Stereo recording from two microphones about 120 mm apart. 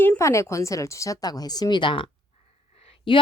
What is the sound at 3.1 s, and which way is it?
Speech, 45° left (ahead or behind).